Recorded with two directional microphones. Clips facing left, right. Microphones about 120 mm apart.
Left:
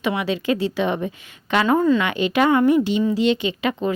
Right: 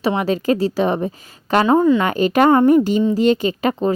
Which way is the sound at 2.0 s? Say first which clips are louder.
Right 4 dB; 40° right (ahead or behind).